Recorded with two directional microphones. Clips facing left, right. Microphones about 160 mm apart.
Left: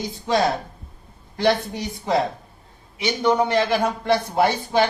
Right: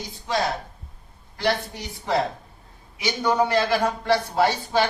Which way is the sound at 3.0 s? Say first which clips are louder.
Left 2 dB; 25° left (ahead or behind).